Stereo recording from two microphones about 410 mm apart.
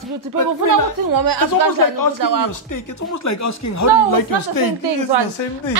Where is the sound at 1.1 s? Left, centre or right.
Right.